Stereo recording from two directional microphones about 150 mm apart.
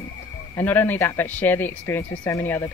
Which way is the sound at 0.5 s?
15° left (ahead or behind).